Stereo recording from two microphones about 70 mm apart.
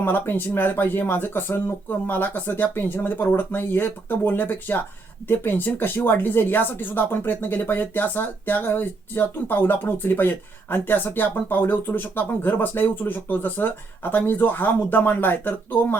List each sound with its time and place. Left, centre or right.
0.0 s speech: left